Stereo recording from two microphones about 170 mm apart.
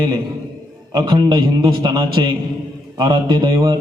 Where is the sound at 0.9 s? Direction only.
25° right (ahead or behind).